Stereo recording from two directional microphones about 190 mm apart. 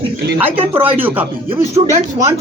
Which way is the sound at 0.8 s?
10° right (ahead or behind).